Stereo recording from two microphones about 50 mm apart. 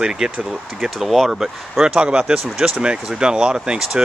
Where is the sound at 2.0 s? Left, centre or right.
Centre.